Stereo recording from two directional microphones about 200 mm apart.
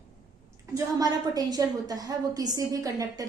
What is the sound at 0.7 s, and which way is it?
A woman's voice, 15° right (ahead or behind).